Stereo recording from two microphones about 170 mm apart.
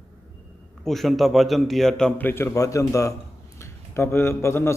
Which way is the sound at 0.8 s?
Centre (ahead or behind).